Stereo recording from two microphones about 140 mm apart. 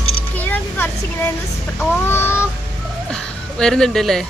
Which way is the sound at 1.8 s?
15° left (ahead or behind).